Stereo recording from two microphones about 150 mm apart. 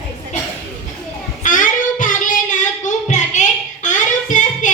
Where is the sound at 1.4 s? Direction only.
60° left (ahead or behind).